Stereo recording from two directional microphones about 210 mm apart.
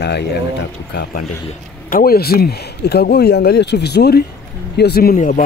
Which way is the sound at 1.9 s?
45° left (ahead or behind).